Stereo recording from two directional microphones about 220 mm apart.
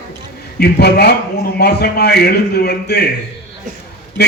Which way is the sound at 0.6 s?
45° left (ahead or behind).